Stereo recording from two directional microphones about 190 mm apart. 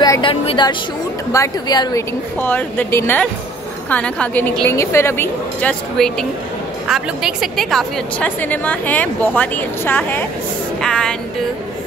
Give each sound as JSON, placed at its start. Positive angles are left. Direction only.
{"t": 0.0, "sound": "a woman's voice", "side_deg": 20}
{"t": 10.8, "sound": "music", "side_deg": 5}